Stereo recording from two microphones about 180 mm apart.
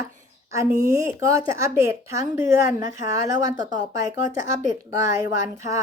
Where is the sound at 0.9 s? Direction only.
20° right (ahead or behind).